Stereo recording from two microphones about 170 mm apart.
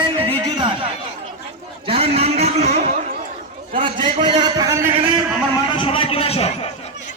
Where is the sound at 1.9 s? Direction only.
35° right (ahead or behind).